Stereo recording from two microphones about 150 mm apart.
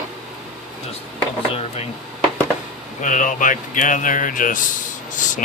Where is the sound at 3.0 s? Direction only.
55° left (ahead or behind).